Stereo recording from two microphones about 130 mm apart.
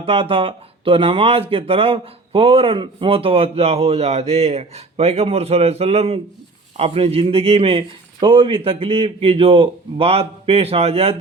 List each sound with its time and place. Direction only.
0.0 s speech: 45° right (ahead or behind)